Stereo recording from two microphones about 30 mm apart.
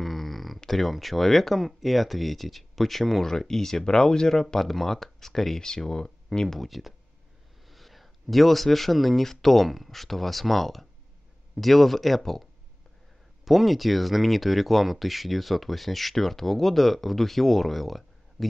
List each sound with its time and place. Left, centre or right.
0.0 s a sound: centre
0.7 s speech: centre
5.6 s speech: left
6.6 s speech: centre
13.5 s speech: centre